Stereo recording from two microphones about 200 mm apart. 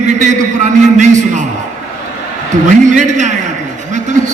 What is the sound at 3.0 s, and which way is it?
Speech, 35° right (ahead or behind).